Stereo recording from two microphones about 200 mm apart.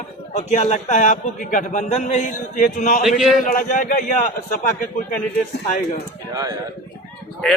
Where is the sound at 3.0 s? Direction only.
Centre (ahead or behind).